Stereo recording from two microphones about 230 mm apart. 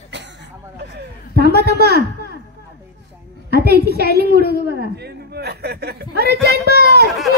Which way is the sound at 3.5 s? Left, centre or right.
Right.